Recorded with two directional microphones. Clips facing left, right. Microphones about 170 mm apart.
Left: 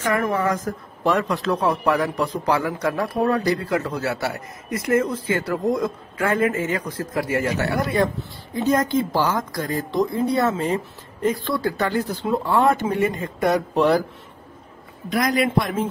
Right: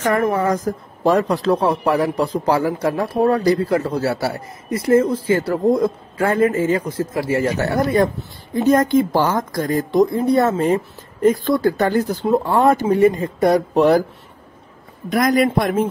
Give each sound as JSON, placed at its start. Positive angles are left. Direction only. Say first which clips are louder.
{"t": 0.2, "sound": "a man's voice", "louder": "right 4 dB", "side_deg": -35}
{"t": 7.8, "sound": "a man's voice", "louder": "right 6 dB", "side_deg": -40}
{"t": 8.5, "sound": "speech", "louder": "right 5 dB", "side_deg": -50}
{"t": 15.0, "sound": "speech", "louder": "right 5 dB", "side_deg": -50}